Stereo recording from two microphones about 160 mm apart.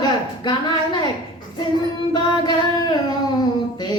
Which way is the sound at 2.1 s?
25° left (ahead or behind).